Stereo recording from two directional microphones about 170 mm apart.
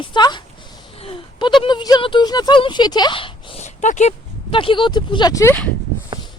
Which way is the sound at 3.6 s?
45° left (ahead or behind).